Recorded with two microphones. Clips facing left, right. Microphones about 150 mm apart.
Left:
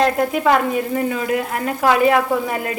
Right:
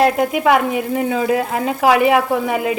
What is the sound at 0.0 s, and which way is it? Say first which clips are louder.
Speech: right 2 dB; 10° right (ahead or behind).